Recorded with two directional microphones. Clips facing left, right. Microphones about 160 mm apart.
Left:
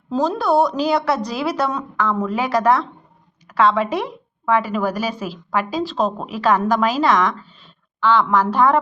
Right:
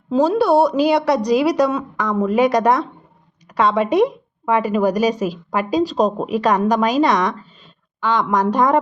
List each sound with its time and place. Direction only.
0.1 s a woman's voice: 10° right (ahead or behind)